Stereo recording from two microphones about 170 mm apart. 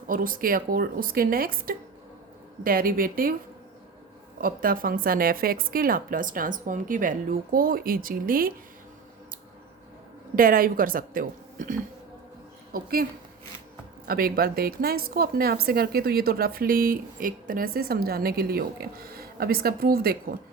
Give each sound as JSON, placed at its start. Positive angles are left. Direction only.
{"t": 0.1, "sound": "speech", "side_deg": -55}
{"t": 4.4, "sound": "speech", "side_deg": -55}
{"t": 10.3, "sound": "speech", "side_deg": -55}
{"t": 14.1, "sound": "speech", "side_deg": -60}